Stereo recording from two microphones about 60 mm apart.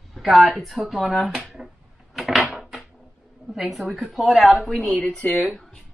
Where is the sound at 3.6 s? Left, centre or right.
Centre.